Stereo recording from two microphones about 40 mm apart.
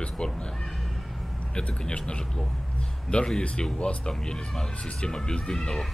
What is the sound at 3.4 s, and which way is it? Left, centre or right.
Speech, left.